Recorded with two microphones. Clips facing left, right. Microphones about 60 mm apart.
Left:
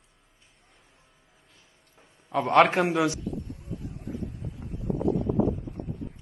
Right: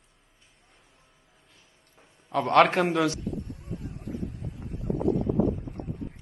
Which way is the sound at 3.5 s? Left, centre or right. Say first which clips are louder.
Even; right.